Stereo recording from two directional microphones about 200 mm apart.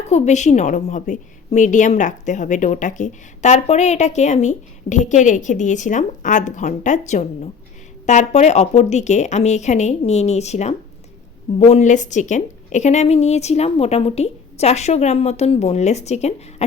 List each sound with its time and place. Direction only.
0.1 s a woman's voice: 35° left (ahead or behind)